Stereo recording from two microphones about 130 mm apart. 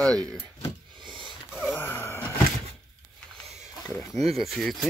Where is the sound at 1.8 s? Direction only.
15° left (ahead or behind).